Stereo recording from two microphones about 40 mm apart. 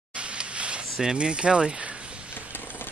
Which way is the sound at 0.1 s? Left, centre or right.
Right.